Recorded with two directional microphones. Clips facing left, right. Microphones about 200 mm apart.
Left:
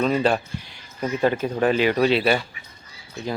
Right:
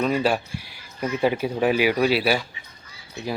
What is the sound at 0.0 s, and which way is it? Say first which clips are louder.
Speech: left 1 dB; 5° right (ahead or behind).